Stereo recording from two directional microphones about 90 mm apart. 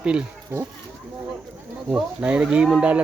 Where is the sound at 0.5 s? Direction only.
20° right (ahead or behind).